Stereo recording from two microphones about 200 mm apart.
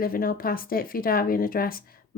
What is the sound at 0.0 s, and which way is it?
Speech, 45° left (ahead or behind).